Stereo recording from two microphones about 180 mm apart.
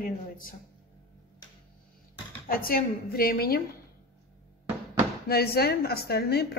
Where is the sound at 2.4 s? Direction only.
55° left (ahead or behind).